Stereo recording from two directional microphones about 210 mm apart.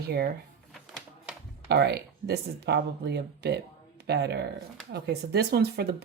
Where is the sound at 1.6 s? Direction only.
50° right (ahead or behind).